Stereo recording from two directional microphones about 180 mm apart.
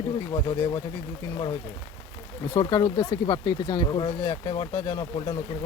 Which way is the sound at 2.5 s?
20° left (ahead or behind).